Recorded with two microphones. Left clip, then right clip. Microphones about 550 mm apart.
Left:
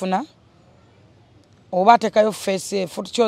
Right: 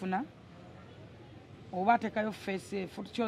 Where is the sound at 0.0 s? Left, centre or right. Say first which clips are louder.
Left 12 dB; left.